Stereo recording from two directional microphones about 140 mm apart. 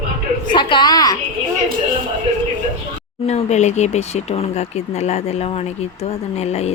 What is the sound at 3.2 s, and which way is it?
Speech, 50° left (ahead or behind).